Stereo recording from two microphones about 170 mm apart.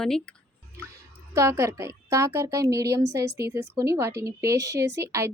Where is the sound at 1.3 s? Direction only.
15° right (ahead or behind).